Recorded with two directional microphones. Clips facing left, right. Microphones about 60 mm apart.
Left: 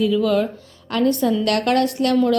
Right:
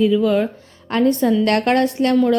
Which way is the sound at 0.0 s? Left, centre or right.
Right.